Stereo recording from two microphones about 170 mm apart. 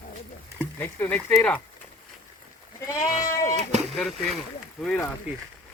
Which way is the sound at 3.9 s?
Centre (ahead or behind).